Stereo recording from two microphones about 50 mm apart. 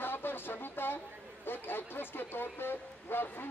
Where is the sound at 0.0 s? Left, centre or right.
Left.